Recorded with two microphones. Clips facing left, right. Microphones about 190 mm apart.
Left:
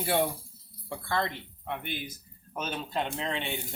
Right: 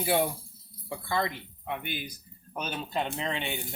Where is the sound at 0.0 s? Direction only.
5° right (ahead or behind).